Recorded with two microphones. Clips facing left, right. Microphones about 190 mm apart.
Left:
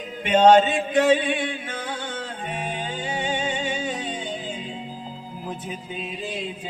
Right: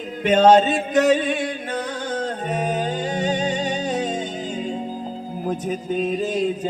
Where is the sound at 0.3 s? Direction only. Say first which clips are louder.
Right 1 dB; 40° right (ahead or behind).